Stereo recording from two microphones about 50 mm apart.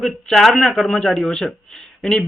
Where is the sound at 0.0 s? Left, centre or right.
Centre.